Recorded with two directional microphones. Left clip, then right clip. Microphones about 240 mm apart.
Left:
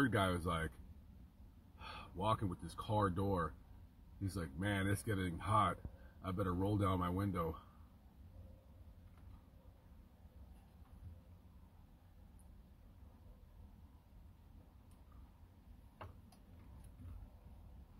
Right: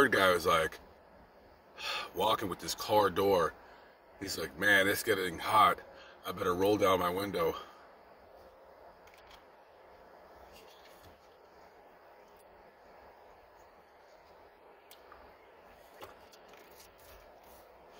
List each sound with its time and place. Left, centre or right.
0.0 s speech: centre
1.9 s speech: centre
4.6 s speech: centre